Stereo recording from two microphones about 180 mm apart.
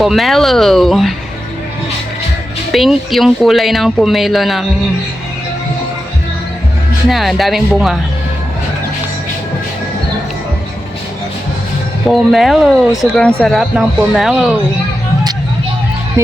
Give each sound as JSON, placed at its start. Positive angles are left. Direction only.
{"t": 0.0, "sound": "speech", "side_deg": 0}
{"t": 2.7, "sound": "speech", "side_deg": 0}
{"t": 7.1, "sound": "speech", "side_deg": 0}
{"t": 12.0, "sound": "speech", "side_deg": 0}
{"t": 16.2, "sound": "music", "side_deg": -15}